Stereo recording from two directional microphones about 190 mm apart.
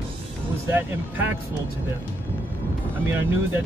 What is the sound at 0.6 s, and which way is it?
Speech, 10° right (ahead or behind).